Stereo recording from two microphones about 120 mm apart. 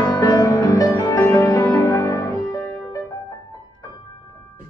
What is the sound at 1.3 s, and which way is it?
Music, 20° left (ahead or behind).